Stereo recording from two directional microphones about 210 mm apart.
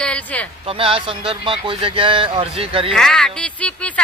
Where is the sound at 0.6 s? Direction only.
25° right (ahead or behind).